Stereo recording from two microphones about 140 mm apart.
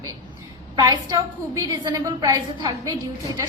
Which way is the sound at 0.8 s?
25° right (ahead or behind).